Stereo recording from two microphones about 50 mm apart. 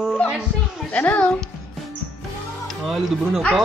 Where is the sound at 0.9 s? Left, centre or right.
Left.